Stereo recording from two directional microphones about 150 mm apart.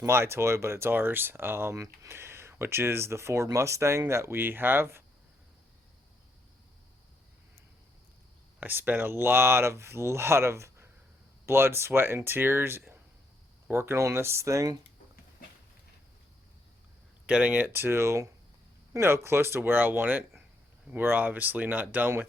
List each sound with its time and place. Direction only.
0.0 s speech: 15° right (ahead or behind)
8.6 s speech: 10° right (ahead or behind)
17.2 s speech: 10° right (ahead or behind)